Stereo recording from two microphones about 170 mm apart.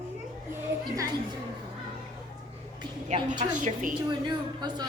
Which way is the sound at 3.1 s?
45° right (ahead or behind).